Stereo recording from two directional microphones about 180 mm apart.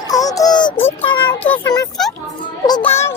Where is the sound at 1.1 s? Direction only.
25° left (ahead or behind).